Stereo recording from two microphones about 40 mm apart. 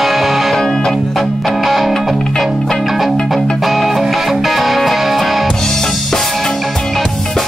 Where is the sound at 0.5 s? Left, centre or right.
Centre.